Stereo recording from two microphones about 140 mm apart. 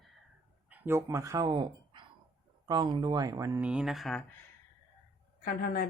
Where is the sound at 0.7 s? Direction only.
15° right (ahead or behind).